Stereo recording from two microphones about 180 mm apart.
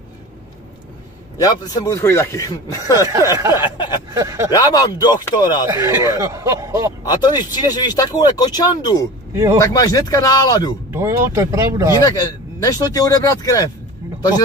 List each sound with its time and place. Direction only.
1.4 s speech: 15° left (ahead or behind)
3.3 s speech: 15° right (ahead or behind)
3.6 s a sound: 25° left (ahead or behind)
4.1 s speech: 15° right (ahead or behind)
4.5 s speech: 20° left (ahead or behind)
5.7 s speech: 15° right (ahead or behind)
7.1 s speech: 25° left (ahead or behind)
9.3 s speech: 15° right (ahead or behind)
9.6 s speech: 20° left (ahead or behind)
10.9 s speech: 15° right (ahead or behind)
12.0 s speech: 20° left (ahead or behind)